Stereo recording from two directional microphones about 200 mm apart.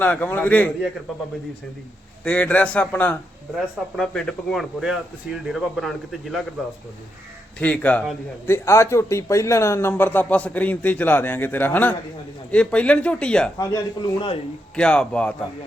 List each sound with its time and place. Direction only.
0.0 s a man's voice: 10° left (ahead or behind)
2.2 s a man's voice: 5° left (ahead or behind)
7.6 s a man's voice: 5° left (ahead or behind)
13.6 s speech: 20° left (ahead or behind)
14.8 s a man's voice: 5° left (ahead or behind)